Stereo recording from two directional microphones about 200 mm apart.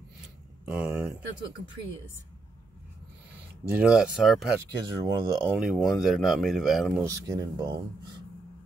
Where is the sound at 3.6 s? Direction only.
5° right (ahead or behind).